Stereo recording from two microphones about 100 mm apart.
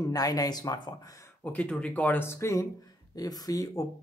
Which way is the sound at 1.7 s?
15° left (ahead or behind).